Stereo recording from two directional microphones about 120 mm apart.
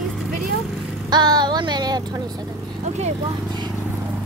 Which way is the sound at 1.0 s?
35° right (ahead or behind).